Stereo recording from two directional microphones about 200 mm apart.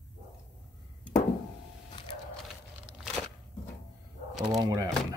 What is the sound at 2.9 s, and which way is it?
Crunch, centre (ahead or behind).